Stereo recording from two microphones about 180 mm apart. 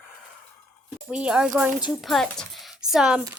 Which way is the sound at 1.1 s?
5° right (ahead or behind).